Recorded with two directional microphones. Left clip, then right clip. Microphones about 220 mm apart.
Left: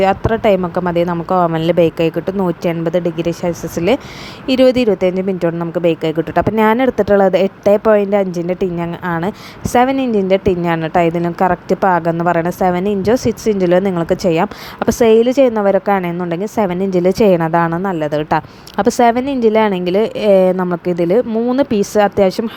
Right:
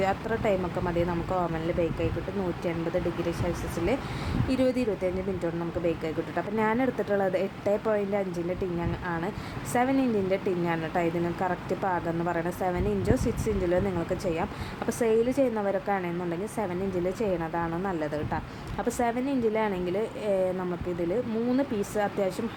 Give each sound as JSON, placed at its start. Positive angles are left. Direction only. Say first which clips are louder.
{"t": 0.0, "sound": "a woman's voice", "louder": "left 14 dB", "side_deg": 40}
{"t": 4.4, "sound": "a woman's voice", "louder": "left 16 dB", "side_deg": 40}